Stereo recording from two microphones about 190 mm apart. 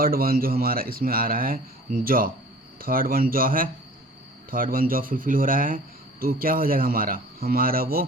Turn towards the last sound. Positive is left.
turn(degrees=-50)  # may be behind; listen again after turning